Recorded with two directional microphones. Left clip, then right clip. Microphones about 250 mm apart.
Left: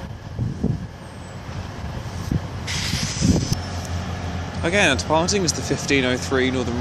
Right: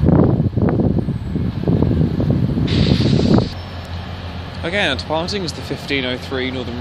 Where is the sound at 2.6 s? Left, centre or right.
Left.